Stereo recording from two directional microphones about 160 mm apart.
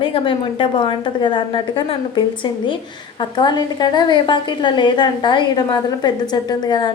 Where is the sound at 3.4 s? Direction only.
25° left (ahead or behind).